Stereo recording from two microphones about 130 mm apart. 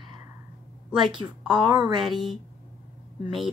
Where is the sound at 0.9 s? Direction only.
35° right (ahead or behind).